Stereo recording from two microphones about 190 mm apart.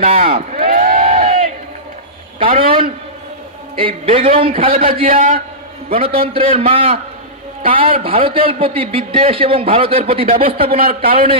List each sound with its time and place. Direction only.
0.0 s speech: 35° right (ahead or behind)
0.7 s a sound: 45° right (ahead or behind)
2.3 s a man's voice: 30° right (ahead or behind)
3.7 s speech: 30° right (ahead or behind)
5.0 s speech: 50° right (ahead or behind)
5.9 s speech: 30° right (ahead or behind)
8.0 s speech: 30° right (ahead or behind)
10.3 s speech: 50° right (ahead or behind)